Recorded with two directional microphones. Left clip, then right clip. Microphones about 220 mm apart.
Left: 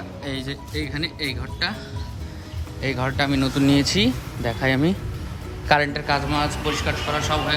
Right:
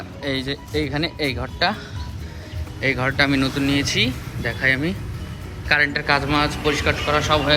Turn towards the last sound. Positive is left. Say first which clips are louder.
# right 5 dB
turn(degrees=10)  # may be behind; listen again after turning